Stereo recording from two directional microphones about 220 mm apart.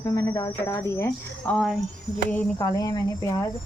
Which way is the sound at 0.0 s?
20° left (ahead or behind).